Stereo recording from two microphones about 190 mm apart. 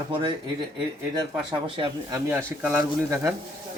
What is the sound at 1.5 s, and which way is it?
Speech, 25° right (ahead or behind).